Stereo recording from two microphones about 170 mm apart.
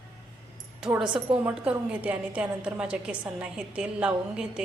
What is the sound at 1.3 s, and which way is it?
A woman's voice, 10° right (ahead or behind).